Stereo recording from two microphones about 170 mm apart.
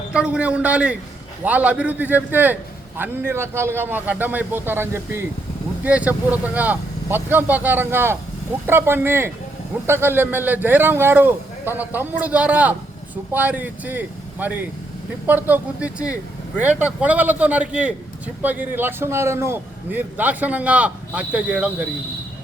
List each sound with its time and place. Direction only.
0.1 s a man's voice: 5° right (ahead or behind)